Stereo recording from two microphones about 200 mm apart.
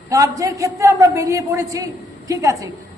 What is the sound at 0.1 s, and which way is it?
A man's voice, 15° right (ahead or behind).